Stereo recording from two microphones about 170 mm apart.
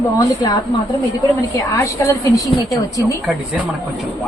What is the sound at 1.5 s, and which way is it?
Speech, 20° left (ahead or behind).